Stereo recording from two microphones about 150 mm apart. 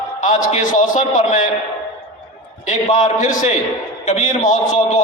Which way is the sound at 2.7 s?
55° left (ahead or behind).